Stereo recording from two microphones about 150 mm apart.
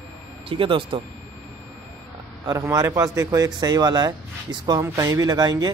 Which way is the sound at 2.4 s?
20° right (ahead or behind).